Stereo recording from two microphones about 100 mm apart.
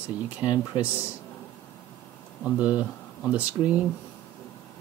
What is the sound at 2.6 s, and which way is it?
Speech, 15° right (ahead or behind).